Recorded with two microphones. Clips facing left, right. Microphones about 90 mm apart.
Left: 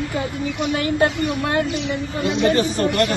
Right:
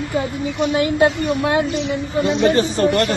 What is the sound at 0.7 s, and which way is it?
Speech, 20° right (ahead or behind).